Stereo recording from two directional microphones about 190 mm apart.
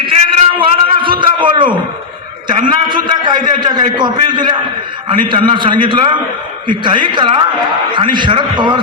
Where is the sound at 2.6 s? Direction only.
25° right (ahead or behind).